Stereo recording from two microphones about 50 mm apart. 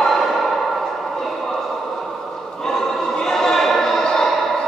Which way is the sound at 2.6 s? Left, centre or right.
Centre.